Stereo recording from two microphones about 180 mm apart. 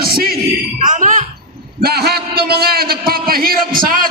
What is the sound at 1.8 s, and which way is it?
A man's voice, 60° right (ahead or behind).